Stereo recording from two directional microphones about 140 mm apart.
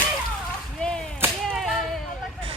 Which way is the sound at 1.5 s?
Centre (ahead or behind).